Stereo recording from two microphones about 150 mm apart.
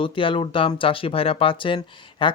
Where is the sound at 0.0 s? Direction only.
35° left (ahead or behind).